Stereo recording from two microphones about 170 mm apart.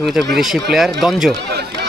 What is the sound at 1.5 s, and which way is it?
Speech, 75° right (ahead or behind).